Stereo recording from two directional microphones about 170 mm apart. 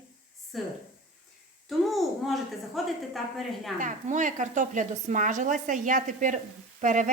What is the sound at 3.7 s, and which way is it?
A woman's voice, 50° right (ahead or behind).